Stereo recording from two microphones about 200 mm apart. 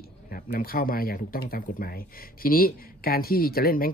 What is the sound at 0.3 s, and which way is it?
Speech, 45° left (ahead or behind).